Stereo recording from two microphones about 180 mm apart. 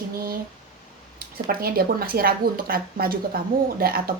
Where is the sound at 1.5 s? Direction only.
55° right (ahead or behind).